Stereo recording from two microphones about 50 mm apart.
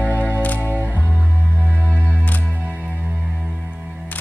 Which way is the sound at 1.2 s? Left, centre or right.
Right.